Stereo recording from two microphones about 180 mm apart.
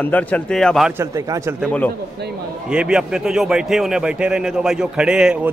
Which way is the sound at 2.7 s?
5° right (ahead or behind).